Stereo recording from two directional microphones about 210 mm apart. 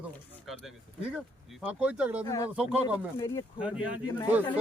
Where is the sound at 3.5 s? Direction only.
5° right (ahead or behind).